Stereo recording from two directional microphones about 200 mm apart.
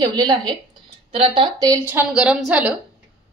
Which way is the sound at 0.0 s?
20° right (ahead or behind).